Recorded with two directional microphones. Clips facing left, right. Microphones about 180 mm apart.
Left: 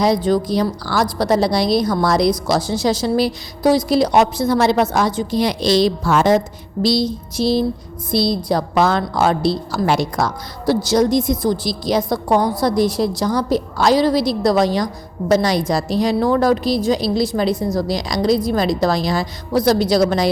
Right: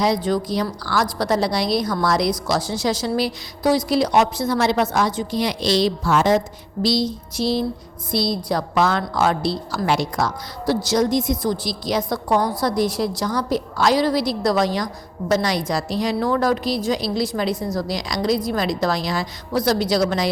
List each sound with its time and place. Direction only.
0.0 s a woman's voice: 35° left (ahead or behind)